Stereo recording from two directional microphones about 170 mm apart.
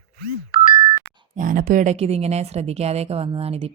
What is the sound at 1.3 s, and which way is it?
Speech, 55° right (ahead or behind).